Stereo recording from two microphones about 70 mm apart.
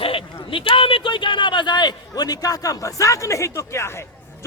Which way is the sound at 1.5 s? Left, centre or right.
Left.